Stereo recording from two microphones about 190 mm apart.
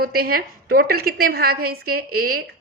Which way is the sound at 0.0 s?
55° right (ahead or behind).